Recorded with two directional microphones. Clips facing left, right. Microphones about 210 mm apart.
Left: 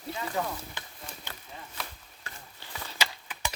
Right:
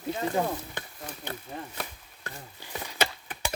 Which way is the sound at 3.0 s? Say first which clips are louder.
Right 5 dB; 50° right (ahead or behind).